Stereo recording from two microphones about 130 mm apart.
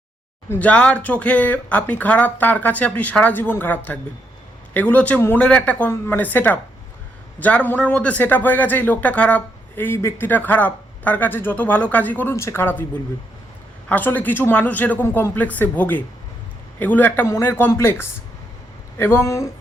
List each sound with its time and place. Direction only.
0.5 s a man's voice: 10° left (ahead or behind)
13.8 s speech: 15° left (ahead or behind)